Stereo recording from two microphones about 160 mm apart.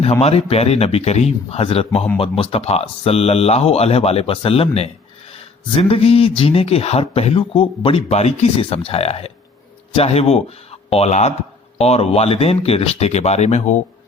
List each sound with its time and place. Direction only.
0.0 s speech: 40° left (ahead or behind)